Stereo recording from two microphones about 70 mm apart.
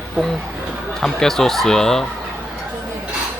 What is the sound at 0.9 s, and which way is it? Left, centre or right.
Speech, centre.